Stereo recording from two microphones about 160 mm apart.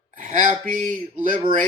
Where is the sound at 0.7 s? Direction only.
60° right (ahead or behind).